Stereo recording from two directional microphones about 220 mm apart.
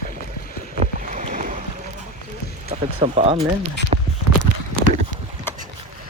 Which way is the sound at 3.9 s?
30° right (ahead or behind).